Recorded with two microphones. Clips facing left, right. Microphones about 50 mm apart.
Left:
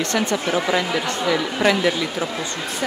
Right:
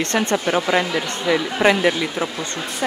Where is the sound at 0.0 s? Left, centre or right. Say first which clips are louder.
Right 1 dB; right.